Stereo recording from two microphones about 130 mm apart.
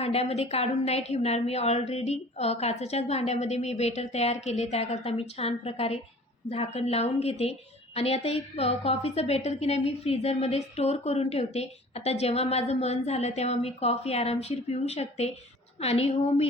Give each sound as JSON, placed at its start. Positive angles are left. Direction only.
{"t": 0.0, "sound": "a woman's voice", "side_deg": 55}